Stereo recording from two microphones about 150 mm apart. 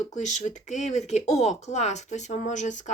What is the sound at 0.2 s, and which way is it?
Speech, 50° left (ahead or behind).